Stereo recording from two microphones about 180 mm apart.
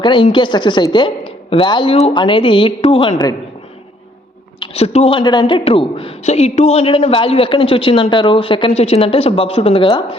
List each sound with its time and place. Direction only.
0.0 s a woman's voice: 25° left (ahead or behind)
4.6 s a woman's voice: 35° left (ahead or behind)